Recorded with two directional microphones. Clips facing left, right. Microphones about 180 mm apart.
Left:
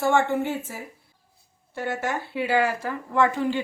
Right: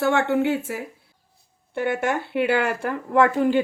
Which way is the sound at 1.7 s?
60° right (ahead or behind).